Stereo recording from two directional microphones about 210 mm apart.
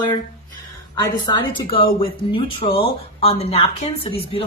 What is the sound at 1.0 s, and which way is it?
Speech, 20° left (ahead or behind).